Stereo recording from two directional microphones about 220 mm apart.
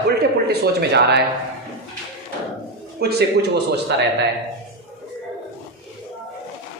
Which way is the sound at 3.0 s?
45° right (ahead or behind).